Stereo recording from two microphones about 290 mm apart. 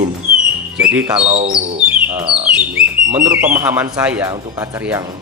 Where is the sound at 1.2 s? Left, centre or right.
Right.